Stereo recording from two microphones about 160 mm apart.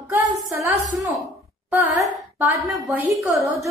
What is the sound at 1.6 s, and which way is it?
Speech, 15° right (ahead or behind).